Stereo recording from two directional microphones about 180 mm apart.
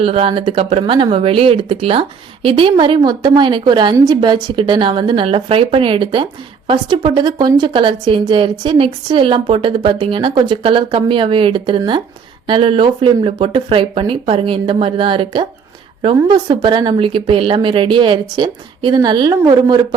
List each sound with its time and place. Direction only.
0.0 s a woman's voice: 30° right (ahead or behind)